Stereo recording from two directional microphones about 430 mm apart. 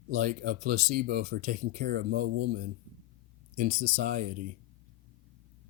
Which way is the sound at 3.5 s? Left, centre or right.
Centre.